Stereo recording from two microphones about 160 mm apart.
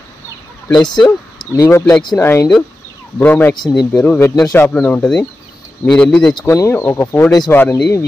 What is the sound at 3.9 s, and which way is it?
Speech, 10° left (ahead or behind).